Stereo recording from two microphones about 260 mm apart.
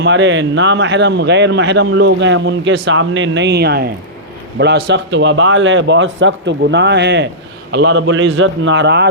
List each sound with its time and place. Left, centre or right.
0.0 s a man's voice: right